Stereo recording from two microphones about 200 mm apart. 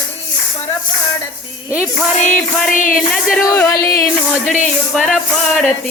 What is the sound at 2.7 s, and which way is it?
Speech, 40° left (ahead or behind).